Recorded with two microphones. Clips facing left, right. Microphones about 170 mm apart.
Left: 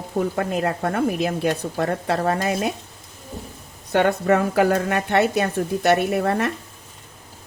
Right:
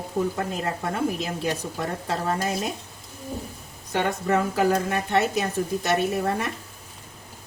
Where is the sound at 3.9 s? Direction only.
65° left (ahead or behind).